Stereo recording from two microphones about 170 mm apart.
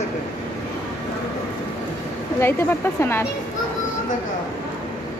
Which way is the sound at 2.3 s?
15° left (ahead or behind).